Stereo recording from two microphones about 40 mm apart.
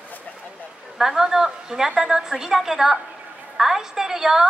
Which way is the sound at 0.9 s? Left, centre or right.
Centre.